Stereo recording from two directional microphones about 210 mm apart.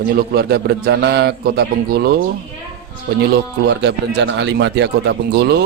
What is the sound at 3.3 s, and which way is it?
Mantra, 55° right (ahead or behind).